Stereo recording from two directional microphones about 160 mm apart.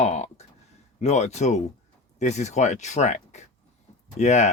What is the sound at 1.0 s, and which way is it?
Speech, 45° left (ahead or behind).